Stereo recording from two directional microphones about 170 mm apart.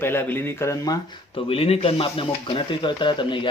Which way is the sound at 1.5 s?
35° left (ahead or behind).